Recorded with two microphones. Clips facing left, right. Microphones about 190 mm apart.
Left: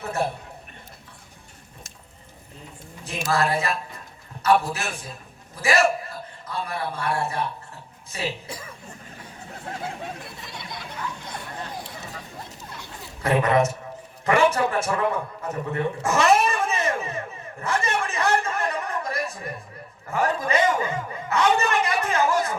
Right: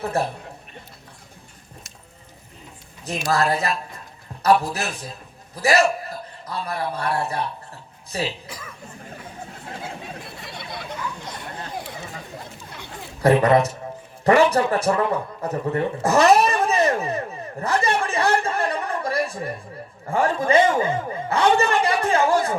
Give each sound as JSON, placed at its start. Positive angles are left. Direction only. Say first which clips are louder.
{"t": 0.1, "sound": "a woman's voice", "louder": "right 2 dB", "side_deg": -35}
{"t": 3.3, "sound": "a woman's voice", "louder": "right 1 dB", "side_deg": -40}
{"t": 10.4, "sound": "a sound", "louder": "right 3 dB", "side_deg": -60}
{"t": 13.2, "sound": "a woman's voice", "louder": "right 4 dB", "side_deg": -35}